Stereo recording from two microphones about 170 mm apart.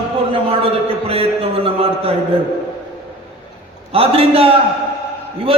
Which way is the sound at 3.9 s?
35° right (ahead or behind).